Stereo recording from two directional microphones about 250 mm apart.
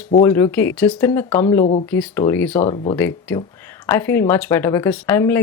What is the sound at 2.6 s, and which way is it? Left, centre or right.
Speech, left.